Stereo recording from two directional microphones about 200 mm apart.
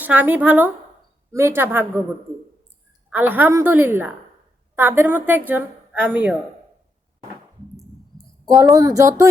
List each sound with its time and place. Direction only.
0.0 s a woman's voice: 10° right (ahead or behind)
3.1 s a woman's voice: 10° right (ahead or behind)
8.7 s a woman's voice: 15° right (ahead or behind)